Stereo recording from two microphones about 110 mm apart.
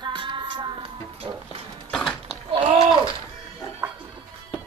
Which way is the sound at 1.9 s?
5° left (ahead or behind).